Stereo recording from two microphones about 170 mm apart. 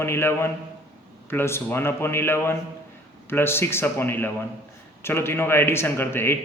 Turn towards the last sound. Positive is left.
turn(degrees=15)  # may be behind; listen again after turning